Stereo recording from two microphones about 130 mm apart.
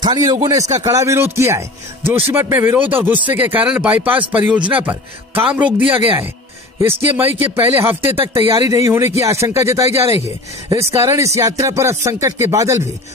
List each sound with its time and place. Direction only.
0.0 s speech: 35° right (ahead or behind)